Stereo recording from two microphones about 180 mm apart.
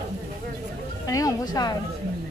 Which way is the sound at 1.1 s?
20° left (ahead or behind).